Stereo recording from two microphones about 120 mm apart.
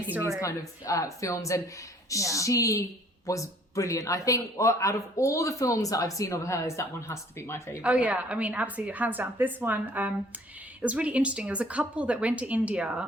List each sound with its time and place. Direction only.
0.3 s a man's voice: 25° left (ahead or behind)
7.8 s a woman's voice: 10° right (ahead or behind)